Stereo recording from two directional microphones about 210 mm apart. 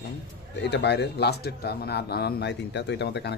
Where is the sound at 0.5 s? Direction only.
55° left (ahead or behind).